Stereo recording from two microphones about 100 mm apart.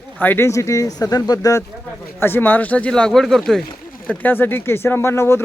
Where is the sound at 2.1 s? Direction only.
20° left (ahead or behind); by 3.6 s 5° left (ahead or behind).